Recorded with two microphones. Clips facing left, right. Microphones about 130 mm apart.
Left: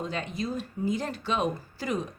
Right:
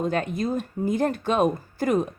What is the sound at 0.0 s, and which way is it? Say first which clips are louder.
Speech: right 7 dB; 50° right (ahead or behind).